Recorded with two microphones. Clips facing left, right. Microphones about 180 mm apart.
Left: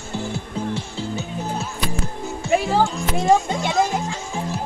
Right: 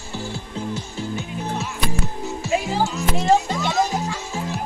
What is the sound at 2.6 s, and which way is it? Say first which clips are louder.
Music: left 3 dB; 60° left (ahead or behind).